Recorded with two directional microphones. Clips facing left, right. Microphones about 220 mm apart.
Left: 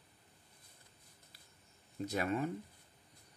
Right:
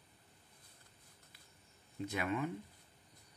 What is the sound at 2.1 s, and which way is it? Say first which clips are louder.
Speech: left 2 dB; 40° left (ahead or behind).